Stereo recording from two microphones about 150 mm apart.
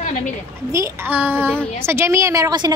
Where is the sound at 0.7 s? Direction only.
15° right (ahead or behind).